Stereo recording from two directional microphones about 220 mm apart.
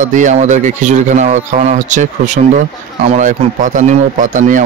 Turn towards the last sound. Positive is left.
turn(degrees=-35)  # may be behind; listen again after turning